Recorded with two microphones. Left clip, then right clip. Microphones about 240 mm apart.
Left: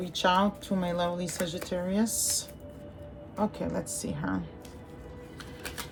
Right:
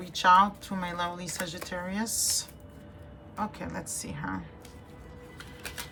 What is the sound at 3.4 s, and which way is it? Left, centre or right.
Speech, centre.